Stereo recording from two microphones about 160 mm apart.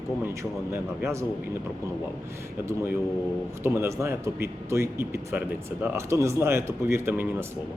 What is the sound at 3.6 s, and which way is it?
Speech, 15° right (ahead or behind).